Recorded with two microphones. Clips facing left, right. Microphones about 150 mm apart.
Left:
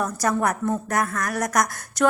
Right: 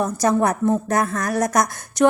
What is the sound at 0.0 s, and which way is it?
Speech, 25° right (ahead or behind).